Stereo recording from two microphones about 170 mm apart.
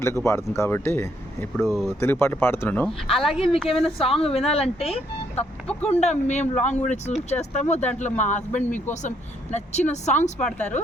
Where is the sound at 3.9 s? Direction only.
35° left (ahead or behind).